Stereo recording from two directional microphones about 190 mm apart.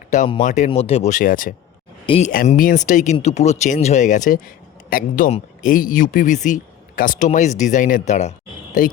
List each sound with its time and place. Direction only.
0.3 s speech: 40° left (ahead or behind)
2.0 s speech: 35° left (ahead or behind)
2.3 s speech: 45° left (ahead or behind)